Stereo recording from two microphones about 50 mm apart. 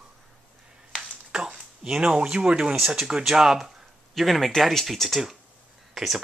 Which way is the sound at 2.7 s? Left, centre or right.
Centre.